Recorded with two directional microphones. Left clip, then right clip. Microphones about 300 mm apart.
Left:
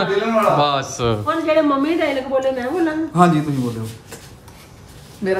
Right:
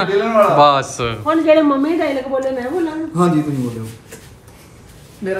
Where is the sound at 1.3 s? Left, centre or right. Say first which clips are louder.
Right 5 dB; right.